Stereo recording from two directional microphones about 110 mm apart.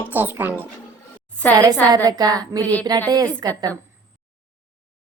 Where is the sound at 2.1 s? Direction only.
35° right (ahead or behind).